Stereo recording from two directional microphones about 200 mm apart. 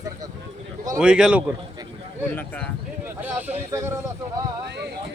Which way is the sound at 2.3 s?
10° left (ahead or behind).